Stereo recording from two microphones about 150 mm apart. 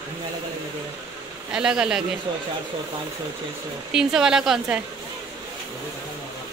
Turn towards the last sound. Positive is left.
turn(degrees=-5)  # may be behind; listen again after turning